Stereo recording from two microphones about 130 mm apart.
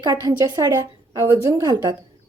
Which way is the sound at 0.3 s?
30° right (ahead or behind).